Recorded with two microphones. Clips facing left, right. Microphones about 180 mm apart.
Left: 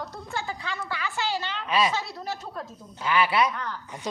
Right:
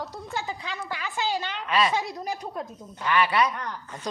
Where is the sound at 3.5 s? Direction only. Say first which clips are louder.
Even; 15° right (ahead or behind).